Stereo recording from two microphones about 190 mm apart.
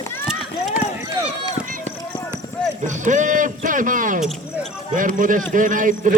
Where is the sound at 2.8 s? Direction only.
40° right (ahead or behind).